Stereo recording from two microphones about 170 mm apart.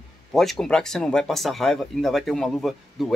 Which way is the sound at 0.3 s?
Centre (ahead or behind).